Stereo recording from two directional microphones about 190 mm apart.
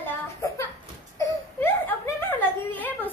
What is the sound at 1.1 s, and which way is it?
Whimper, 15° left (ahead or behind).